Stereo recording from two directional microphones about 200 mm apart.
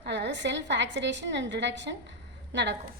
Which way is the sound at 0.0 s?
60° right (ahead or behind).